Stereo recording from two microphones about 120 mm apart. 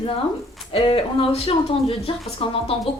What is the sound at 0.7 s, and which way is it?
Speech, 50° left (ahead or behind).